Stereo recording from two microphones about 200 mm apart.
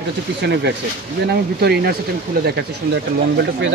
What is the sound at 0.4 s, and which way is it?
Speech, 55° right (ahead or behind).